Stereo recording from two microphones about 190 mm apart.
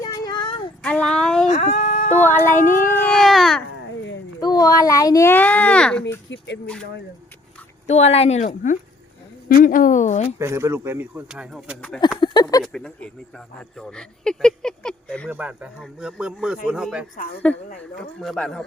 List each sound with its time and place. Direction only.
0.0 s a sound: 20° left (ahead or behind)
0.8 s a sound: 5° left (ahead or behind)
1.5 s a sound: 45° left (ahead or behind)
2.2 s child singing: 10° left (ahead or behind)
2.6 s speech: 45° left (ahead or behind)
2.8 s speech: 10° left (ahead or behind)
4.4 s a child's voice: 20° left (ahead or behind)
7.9 s speech: 35° left (ahead or behind)
10.3 s speech: 15° right (ahead or behind)
11.9 s speech: 20° left (ahead or behind)
12.6 s speech: 5° left (ahead or behind)
15.3 s speech: 10° right (ahead or behind)
17.4 s child singing: 5° left (ahead or behind)
17.7 s speech: 5° left (ahead or behind)